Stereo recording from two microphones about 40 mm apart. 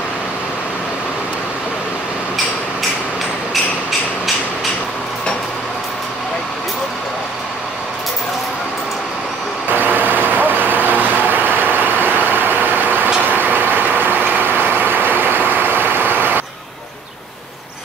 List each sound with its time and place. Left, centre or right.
9.7 s vehicle: right